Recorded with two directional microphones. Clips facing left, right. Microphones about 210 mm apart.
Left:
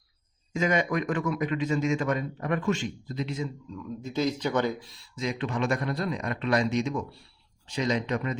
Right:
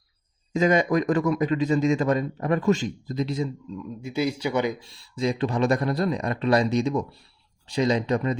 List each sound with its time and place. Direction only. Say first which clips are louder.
0.5 s a man's voice: right 5 dB; 35° right (ahead or behind)
4.0 s speech: right 2 dB; 10° right (ahead or behind)
4.8 s a man's voice: right 6 dB; 35° right (ahead or behind)